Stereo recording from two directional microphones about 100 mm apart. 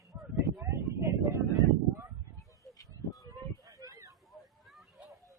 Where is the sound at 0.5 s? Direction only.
25° right (ahead or behind).